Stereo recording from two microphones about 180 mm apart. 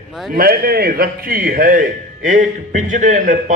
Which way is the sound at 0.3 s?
55° right (ahead or behind).